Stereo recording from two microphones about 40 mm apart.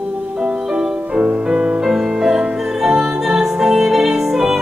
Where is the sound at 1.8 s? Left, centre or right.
Centre.